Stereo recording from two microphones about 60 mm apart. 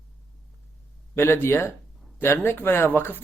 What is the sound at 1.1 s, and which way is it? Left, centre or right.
Speech, left.